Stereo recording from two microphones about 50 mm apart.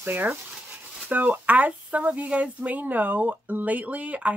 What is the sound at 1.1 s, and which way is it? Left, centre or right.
Speech, right.